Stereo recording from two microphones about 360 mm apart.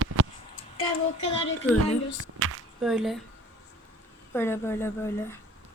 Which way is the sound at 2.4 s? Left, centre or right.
Right.